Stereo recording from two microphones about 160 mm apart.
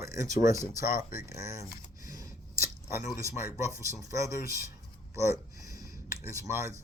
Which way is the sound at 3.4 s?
20° right (ahead or behind).